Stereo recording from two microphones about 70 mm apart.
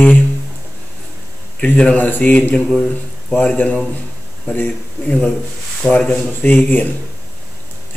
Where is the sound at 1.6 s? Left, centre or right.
Centre.